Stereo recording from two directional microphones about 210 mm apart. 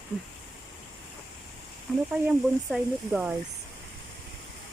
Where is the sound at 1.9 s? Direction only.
Centre (ahead or behind).